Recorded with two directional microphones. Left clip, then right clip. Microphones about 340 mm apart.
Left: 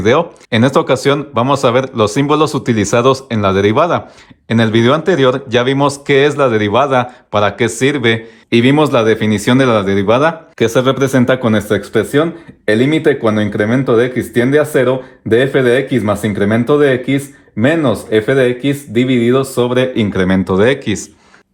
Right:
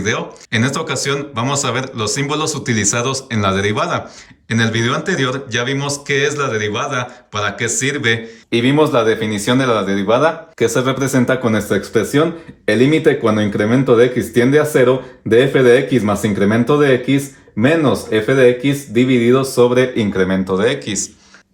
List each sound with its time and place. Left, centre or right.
0.0 s speech: centre
8.4 s speech: left